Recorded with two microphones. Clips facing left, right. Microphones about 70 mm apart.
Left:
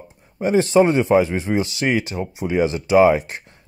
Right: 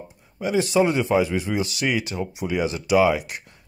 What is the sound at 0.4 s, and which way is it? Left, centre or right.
Speech, left.